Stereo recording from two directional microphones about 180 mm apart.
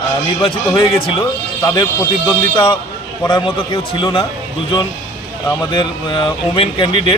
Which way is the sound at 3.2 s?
25° left (ahead or behind).